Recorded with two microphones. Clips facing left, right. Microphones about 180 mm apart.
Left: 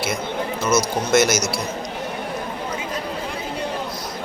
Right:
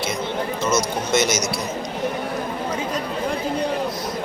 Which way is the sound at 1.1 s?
5° left (ahead or behind).